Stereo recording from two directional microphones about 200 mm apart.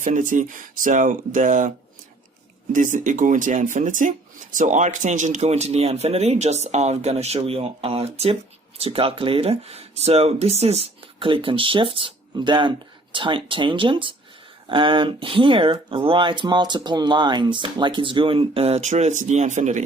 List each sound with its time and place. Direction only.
0.0 s speech: 40° right (ahead or behind)
2.7 s speech: 40° right (ahead or behind)